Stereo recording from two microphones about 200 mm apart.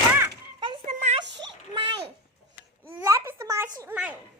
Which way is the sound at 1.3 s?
60° right (ahead or behind).